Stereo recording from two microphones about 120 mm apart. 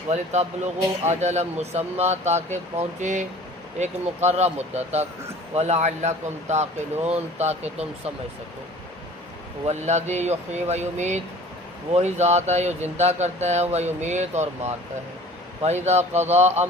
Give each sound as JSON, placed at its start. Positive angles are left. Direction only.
{"t": 0.1, "sound": "speech", "side_deg": -70}
{"t": 3.8, "sound": "speech", "side_deg": -70}
{"t": 9.6, "sound": "speech", "side_deg": -70}